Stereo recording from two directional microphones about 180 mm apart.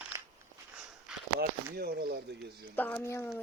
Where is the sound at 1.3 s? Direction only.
60° right (ahead or behind).